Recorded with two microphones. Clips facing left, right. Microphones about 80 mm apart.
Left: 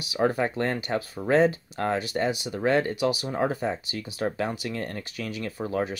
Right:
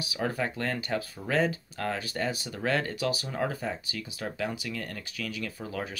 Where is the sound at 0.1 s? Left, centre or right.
Left.